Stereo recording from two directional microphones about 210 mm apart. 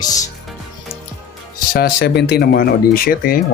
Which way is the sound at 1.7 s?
50° left (ahead or behind).